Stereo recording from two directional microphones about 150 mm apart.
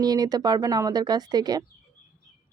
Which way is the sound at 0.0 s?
25° right (ahead or behind).